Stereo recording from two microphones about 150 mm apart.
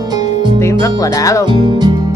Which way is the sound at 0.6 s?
20° left (ahead or behind).